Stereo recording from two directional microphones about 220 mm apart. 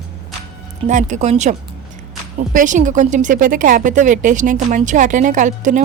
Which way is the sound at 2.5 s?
35° right (ahead or behind).